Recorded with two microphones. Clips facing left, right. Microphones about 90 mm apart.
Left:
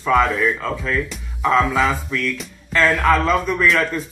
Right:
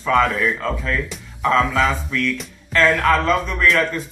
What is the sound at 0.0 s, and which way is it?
Speech, 5° left (ahead or behind).